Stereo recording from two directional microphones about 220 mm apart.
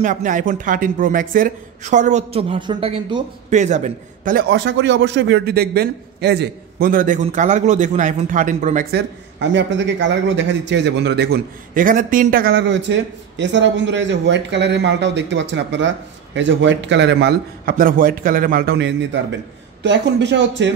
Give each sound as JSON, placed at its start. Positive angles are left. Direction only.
{"t": 0.0, "sound": "a man's voice", "side_deg": -35}
{"t": 8.9, "sound": "a man's voice", "side_deg": -55}
{"t": 11.7, "sound": "a man's voice", "side_deg": -40}